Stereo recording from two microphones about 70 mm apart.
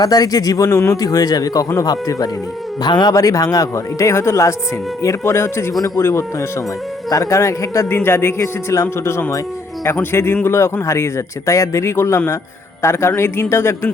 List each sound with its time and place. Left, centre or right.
0.0 s speech: left
2.8 s speech: left
3.2 s a man's voice: left
7.1 s speech: left
7.9 s a man's voice: left
8.4 s speech: left
9.8 s a man's voice: left